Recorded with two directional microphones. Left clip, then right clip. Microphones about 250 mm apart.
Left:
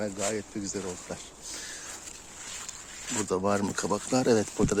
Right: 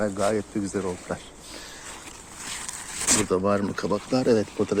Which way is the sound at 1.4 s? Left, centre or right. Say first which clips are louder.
Left 3 dB; centre.